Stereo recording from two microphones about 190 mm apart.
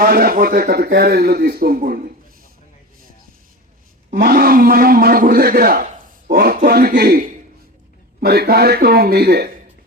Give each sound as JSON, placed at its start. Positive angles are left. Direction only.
{"t": 0.0, "sound": "a man's voice", "side_deg": -50}
{"t": 4.1, "sound": "a man's voice", "side_deg": -50}